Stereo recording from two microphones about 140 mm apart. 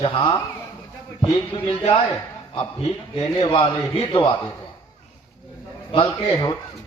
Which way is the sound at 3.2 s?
40° left (ahead or behind).